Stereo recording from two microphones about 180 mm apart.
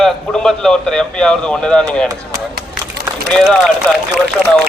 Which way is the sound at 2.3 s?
60° right (ahead or behind).